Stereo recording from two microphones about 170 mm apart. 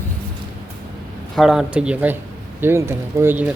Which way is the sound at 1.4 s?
5° right (ahead or behind).